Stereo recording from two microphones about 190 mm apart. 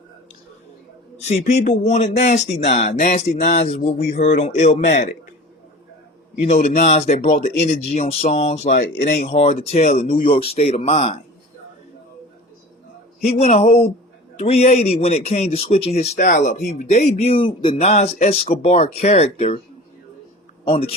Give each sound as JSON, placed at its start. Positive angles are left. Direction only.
{"t": 1.2, "sound": "speech", "side_deg": 35}
{"t": 6.4, "sound": "speech", "side_deg": 35}
{"t": 13.2, "sound": "speech", "side_deg": 35}
{"t": 20.7, "sound": "speech", "side_deg": 30}